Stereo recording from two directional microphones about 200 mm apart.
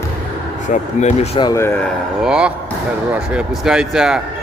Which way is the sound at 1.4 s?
15° left (ahead or behind).